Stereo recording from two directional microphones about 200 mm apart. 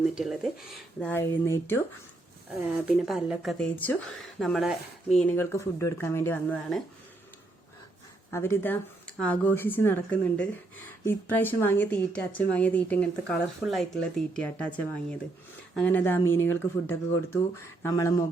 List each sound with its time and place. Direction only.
0.0 s a woman's voice: centre (ahead or behind)
2.6 s a woman's voice: 5° right (ahead or behind)
8.3 s a woman's voice: 10° left (ahead or behind)